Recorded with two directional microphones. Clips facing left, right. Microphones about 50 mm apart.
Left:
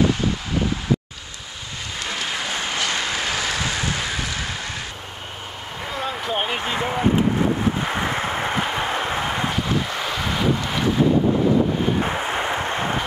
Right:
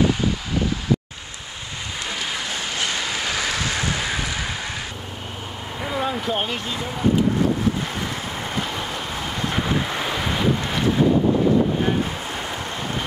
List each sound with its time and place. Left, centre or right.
2.0 s rain: centre
3.0 s a sound: centre
5.8 s vehicle: centre
6.1 s speech: centre
6.5 s speech: left
7.8 s vehicle: left
9.6 s boat: centre
10.2 s wind noise: centre
12.0 s wind noise: left